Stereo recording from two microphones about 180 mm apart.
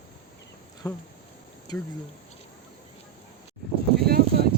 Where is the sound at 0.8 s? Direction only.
20° left (ahead or behind).